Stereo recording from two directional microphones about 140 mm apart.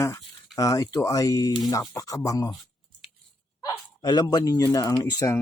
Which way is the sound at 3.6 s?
25° left (ahead or behind).